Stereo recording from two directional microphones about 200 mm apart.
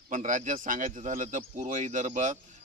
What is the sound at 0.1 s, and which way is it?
A man's voice, 35° right (ahead or behind).